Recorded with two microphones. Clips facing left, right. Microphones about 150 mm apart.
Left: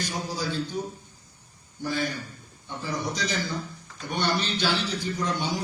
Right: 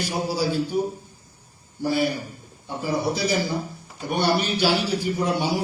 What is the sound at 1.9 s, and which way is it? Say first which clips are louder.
A man's voice: right 6 dB; 10° right (ahead or behind).